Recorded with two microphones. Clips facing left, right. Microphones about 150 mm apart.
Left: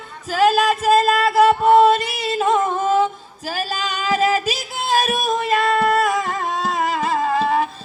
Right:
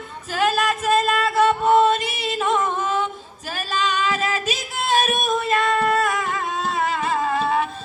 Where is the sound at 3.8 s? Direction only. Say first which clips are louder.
Left 3 dB; 35° left (ahead or behind).